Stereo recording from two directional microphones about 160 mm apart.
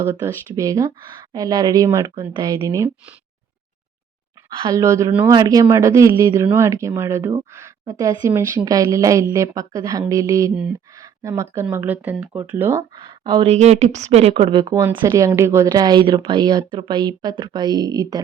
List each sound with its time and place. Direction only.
0.0 s a woman's voice: 15° right (ahead or behind)
4.4 s speech: 30° right (ahead or behind)
4.8 s a woman's voice: 20° right (ahead or behind)
13.0 s speech: 30° right (ahead or behind)
14.8 s a woman's voice: 20° right (ahead or behind)